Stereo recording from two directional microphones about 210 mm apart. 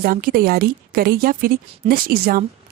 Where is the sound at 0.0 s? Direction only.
45° right (ahead or behind).